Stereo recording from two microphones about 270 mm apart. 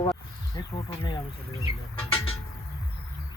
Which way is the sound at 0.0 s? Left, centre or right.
Centre.